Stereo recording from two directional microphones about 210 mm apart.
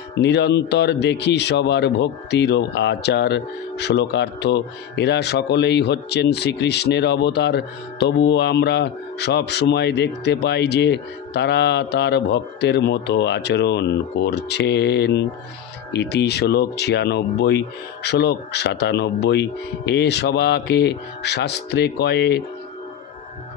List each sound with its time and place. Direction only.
0.2 s speech: 55° left (ahead or behind)